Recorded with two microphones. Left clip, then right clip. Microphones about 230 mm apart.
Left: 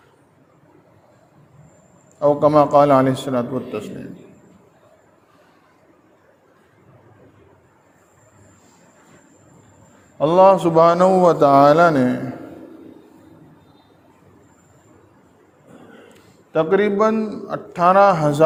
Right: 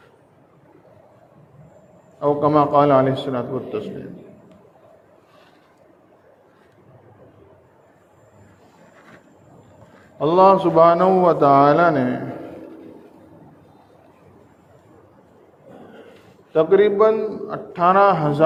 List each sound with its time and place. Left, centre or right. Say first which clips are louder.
2.2 s a man's voice: left 3 dB; left
10.2 s a man's voice: left 1 dB; left
16.5 s a man's voice: right 2 dB; left